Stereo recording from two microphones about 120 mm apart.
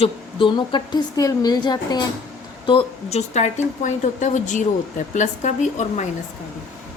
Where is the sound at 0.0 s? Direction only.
45° left (ahead or behind).